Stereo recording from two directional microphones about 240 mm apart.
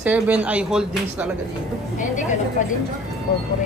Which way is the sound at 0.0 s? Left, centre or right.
Centre.